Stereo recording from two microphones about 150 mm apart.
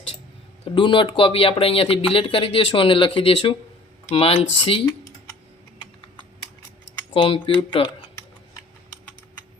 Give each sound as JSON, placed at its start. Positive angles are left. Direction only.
{"t": 0.6, "sound": "speech", "side_deg": 35}
{"t": 7.1, "sound": "speech", "side_deg": 35}